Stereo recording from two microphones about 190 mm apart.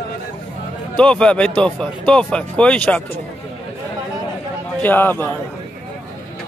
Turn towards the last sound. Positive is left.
turn(degrees=10)  # may be behind; listen again after turning